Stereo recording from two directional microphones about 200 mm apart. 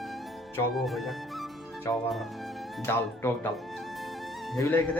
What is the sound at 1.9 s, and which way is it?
A man's voice, 15° left (ahead or behind).